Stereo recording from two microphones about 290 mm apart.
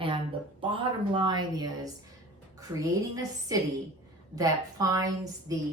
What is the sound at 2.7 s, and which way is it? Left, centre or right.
A woman's voice, centre.